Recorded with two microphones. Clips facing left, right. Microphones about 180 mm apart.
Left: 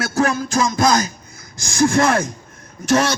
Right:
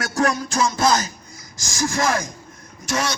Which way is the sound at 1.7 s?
60° left (ahead or behind).